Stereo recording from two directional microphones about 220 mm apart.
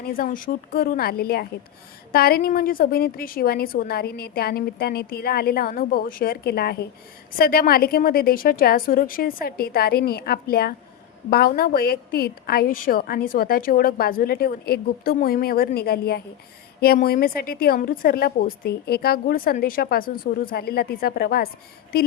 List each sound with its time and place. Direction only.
0.0 s a woman's voice: 40° left (ahead or behind)